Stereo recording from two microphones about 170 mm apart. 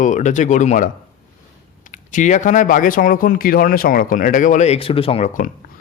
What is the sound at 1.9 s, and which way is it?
Speech, 45° left (ahead or behind).